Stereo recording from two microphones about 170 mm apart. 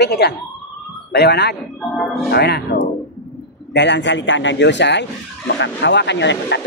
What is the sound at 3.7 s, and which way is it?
A man's voice, 90° left.